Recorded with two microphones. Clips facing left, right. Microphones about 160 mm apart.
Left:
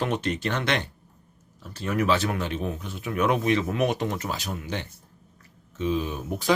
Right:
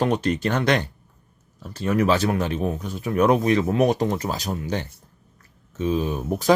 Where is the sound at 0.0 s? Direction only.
40° right (ahead or behind).